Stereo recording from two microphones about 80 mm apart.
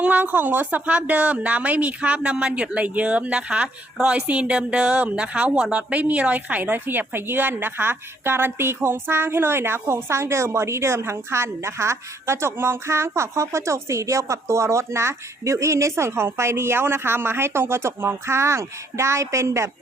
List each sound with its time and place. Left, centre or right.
0.0 s a woman's voice: right